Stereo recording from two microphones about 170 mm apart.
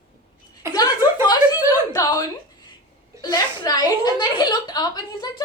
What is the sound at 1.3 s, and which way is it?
A woman's voice, 20° left (ahead or behind).